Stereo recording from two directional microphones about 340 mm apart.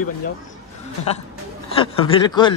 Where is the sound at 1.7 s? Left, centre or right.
Centre.